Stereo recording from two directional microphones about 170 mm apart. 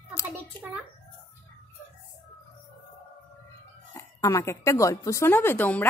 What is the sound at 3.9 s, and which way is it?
A woman's voice, 20° left (ahead or behind).